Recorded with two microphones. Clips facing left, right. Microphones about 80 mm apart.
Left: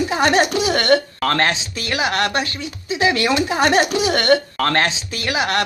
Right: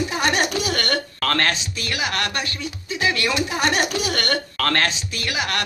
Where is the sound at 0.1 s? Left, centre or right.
Left.